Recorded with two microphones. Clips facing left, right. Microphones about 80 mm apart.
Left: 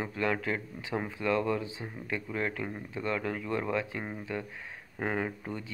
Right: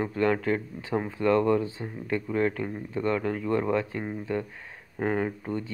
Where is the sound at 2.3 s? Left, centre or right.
Right.